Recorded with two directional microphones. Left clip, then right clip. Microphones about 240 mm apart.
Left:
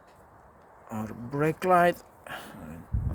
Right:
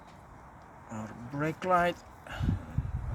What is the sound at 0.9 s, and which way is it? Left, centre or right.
Speech, left.